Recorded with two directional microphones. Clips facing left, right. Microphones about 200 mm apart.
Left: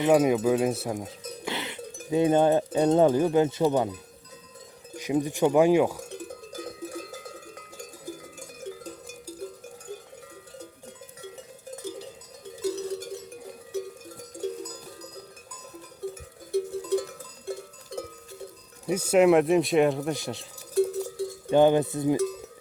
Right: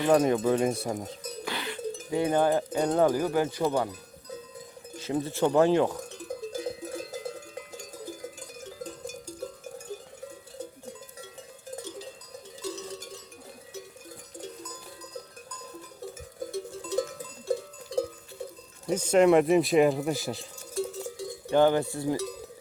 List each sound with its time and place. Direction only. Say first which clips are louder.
0.1 s speech: left 2 dB; 10° left (ahead or behind)
1.5 s cowbell: right 1 dB; 20° left (ahead or behind)
4.9 s speech: left 3 dB; 15° left (ahead or behind)
6.6 s cowbell: right 2 dB; 25° right (ahead or behind)
12.7 s cowbell: left 7 dB; 60° left (ahead or behind)
16.5 s music: left 11 dB; 60° left (ahead or behind)
17.9 s a sound: right 7 dB; 55° left (ahead or behind)
18.9 s speech: left 1 dB; 10° left (ahead or behind)
20.7 s cowbell: left 8 dB; 60° left (ahead or behind)
21.5 s cowbell: left 3 dB; 20° left (ahead or behind)